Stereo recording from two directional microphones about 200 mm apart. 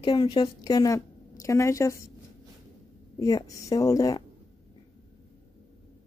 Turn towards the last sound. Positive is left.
turn(degrees=15)  # may be behind; listen again after turning